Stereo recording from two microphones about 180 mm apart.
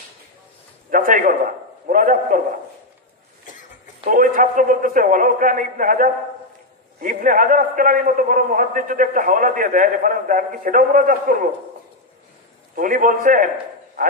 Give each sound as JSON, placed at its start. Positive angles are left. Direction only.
{"t": 0.9, "sound": "a sound", "side_deg": -50}
{"t": 1.9, "sound": "a man's voice", "side_deg": -50}
{"t": 4.0, "sound": "a man's voice", "side_deg": -50}
{"t": 12.7, "sound": "a man's voice", "side_deg": -50}